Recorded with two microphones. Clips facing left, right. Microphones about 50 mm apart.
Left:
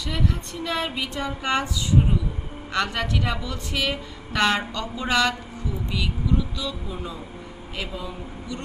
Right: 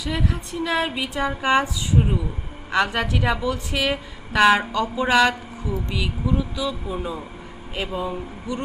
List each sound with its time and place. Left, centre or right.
0.0 s a woman's voice: centre; by 8.6 s right